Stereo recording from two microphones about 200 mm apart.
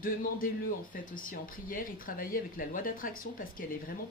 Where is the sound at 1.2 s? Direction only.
45° left (ahead or behind).